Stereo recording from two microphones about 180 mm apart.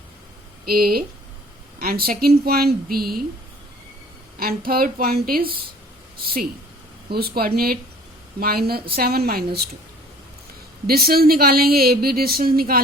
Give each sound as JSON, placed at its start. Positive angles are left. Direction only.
{"t": 0.6, "sound": "speech", "side_deg": -55}
{"t": 4.4, "sound": "speech", "side_deg": -55}
{"t": 7.1, "sound": "speech", "side_deg": -60}
{"t": 10.8, "sound": "speech", "side_deg": -55}